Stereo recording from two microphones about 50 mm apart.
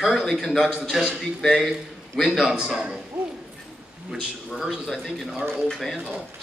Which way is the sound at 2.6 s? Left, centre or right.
Centre.